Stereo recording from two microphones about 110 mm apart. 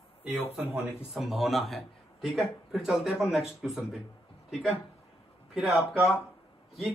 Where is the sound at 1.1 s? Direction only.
5° right (ahead or behind).